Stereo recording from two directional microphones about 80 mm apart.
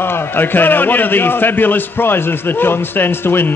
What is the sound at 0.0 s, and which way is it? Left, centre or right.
A man's voice, left.